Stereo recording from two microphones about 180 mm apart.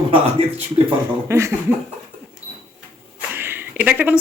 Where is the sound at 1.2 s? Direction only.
15° right (ahead or behind).